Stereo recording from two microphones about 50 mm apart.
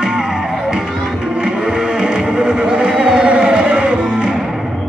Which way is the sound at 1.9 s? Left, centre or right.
Centre.